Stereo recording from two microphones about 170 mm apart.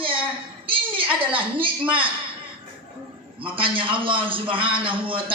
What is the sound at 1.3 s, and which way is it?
Speech, 30° right (ahead or behind).